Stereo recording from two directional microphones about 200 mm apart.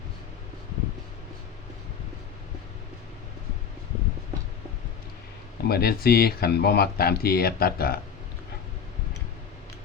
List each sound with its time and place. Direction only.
5.6 s speech: 50° left (ahead or behind)